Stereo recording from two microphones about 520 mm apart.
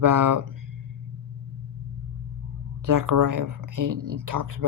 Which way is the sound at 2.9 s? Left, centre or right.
Right.